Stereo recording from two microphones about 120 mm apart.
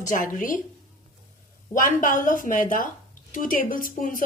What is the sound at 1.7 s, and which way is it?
Speech, 90° left.